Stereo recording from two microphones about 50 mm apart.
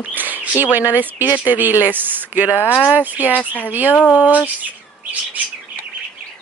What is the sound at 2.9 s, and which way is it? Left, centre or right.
Speech, right.